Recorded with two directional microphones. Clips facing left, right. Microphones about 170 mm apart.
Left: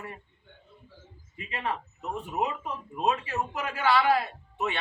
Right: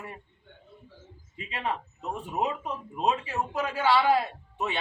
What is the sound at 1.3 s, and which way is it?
A man's voice, 15° right (ahead or behind).